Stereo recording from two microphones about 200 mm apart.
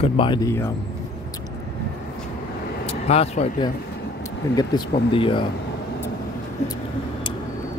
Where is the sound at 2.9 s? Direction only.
30° left (ahead or behind).